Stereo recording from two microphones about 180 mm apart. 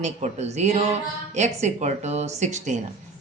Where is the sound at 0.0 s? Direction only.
40° right (ahead or behind).